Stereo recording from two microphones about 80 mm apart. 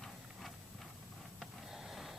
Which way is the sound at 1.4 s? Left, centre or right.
Centre.